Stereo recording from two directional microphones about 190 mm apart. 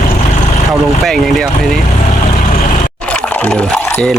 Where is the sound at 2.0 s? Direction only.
40° left (ahead or behind).